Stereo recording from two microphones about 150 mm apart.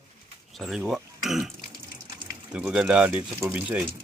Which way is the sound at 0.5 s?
Centre (ahead or behind).